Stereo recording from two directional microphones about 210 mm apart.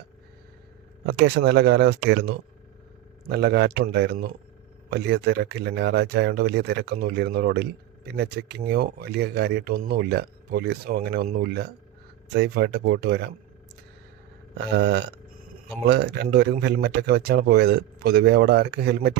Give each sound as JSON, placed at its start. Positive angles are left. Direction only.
{"t": 1.0, "sound": "speech", "side_deg": -55}
{"t": 14.6, "sound": "speech", "side_deg": -55}